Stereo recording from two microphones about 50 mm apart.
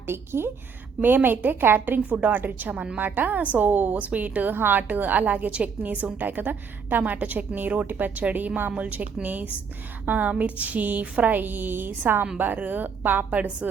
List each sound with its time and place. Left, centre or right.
0.1 s a woman's voice: right
1.0 s a woman's voice: right